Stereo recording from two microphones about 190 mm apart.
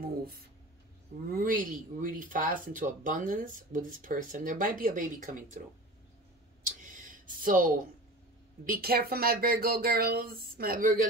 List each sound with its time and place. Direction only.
1.3 s speech: 45° right (ahead or behind)
6.6 s a sound: 45° right (ahead or behind)
8.6 s speech: 50° right (ahead or behind)